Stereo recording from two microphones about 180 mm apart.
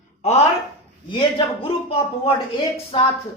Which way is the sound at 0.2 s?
35° left (ahead or behind).